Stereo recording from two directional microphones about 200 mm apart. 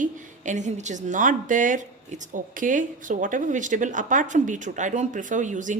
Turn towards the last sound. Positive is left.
turn(degrees=-40)  # may be behind; listen again after turning